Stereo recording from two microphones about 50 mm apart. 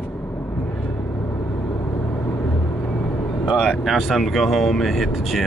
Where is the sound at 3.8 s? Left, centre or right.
Centre.